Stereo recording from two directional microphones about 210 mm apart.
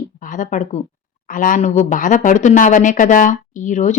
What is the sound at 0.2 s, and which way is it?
Speech, 40° left (ahead or behind).